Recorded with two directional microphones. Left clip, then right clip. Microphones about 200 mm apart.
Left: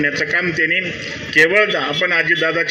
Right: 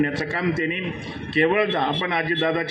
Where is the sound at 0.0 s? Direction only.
40° right (ahead or behind).